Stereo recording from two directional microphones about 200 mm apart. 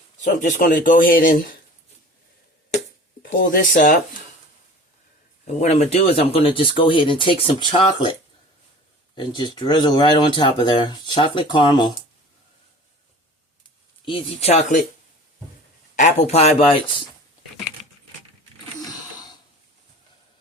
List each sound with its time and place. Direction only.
0.3 s speech: 40° left (ahead or behind)
3.2 s speech: 45° left (ahead or behind)
5.5 s speech: 35° left (ahead or behind)
9.1 s speech: 25° left (ahead or behind)
14.0 s speech: 30° left (ahead or behind)
16.0 s speech: 35° left (ahead or behind)